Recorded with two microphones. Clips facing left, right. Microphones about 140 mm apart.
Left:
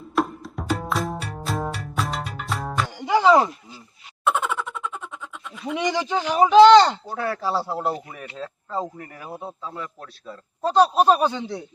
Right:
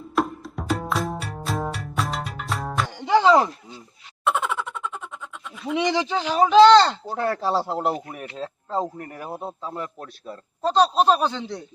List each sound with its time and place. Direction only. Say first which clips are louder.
0.2 s music: even; centre (ahead or behind)
3.0 s music: even; 15° left (ahead or behind)
4.2 s a sound: left 1 dB; centre (ahead or behind)
5.5 s speech: right 2 dB; centre (ahead or behind)
5.9 s speech: even; 10° left (ahead or behind)
7.4 s speech: even; 20° right (ahead or behind)
10.6 s speech: left 1 dB; 10° left (ahead or behind)